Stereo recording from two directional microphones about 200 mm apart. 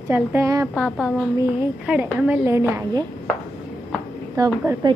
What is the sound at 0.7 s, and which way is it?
Speech, centre (ahead or behind).